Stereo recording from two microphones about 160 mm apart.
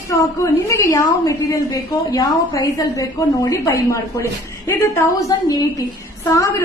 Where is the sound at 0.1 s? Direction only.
20° left (ahead or behind).